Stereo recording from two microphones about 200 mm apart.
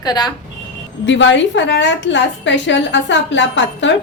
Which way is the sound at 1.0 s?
65° left (ahead or behind).